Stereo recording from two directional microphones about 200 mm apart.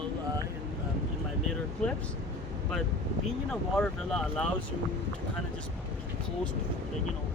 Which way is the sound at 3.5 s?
5° left (ahead or behind).